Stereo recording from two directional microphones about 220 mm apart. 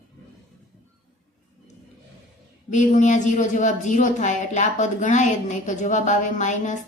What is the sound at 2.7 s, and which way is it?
A woman's voice, 35° left (ahead or behind).